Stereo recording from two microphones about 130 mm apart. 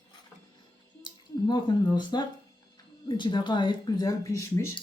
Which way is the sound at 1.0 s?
35° left (ahead or behind).